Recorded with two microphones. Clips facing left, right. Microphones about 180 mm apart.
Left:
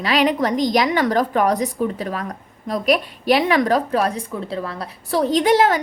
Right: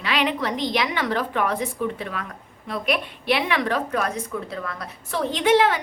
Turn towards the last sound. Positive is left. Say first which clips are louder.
# left 3 dB
turn(degrees=40)  # may be behind; listen again after turning